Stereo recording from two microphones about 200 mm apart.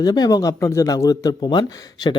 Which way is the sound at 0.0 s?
20° left (ahead or behind).